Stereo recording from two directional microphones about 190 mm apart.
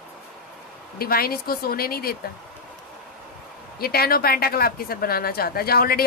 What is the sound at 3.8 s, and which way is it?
Speech, 50° left (ahead or behind).